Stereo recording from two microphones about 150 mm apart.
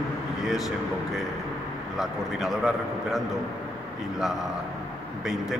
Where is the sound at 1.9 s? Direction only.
Centre (ahead or behind).